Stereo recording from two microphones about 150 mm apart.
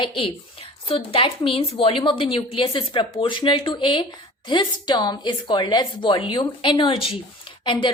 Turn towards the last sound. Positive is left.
turn(degrees=35)  # may be behind; listen again after turning